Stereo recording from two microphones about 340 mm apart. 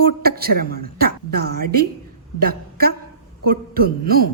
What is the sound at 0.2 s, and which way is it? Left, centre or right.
A woman's voice, right.